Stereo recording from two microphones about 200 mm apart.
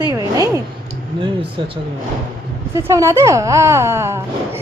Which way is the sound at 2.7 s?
15° right (ahead or behind).